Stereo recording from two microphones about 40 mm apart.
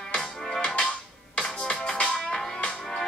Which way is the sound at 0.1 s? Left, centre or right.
Left.